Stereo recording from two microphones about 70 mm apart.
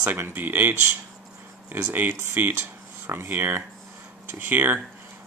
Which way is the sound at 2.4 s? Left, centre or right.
Right.